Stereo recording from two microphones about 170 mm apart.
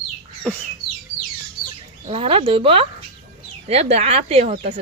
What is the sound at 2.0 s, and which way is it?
Speech, 35° right (ahead or behind).